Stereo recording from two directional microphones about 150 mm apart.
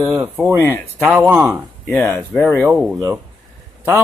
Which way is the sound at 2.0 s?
10° left (ahead or behind).